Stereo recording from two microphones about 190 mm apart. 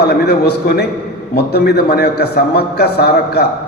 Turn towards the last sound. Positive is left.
turn(degrees=60)  # may be behind; listen again after turning